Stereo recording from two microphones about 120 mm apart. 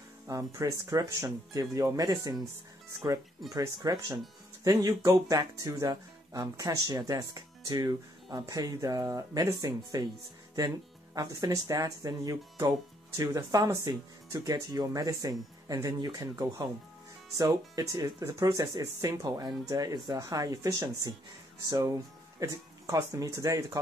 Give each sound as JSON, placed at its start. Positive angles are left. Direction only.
{"t": 0.3, "sound": "speech", "side_deg": -30}
{"t": 11.1, "sound": "speech", "side_deg": -30}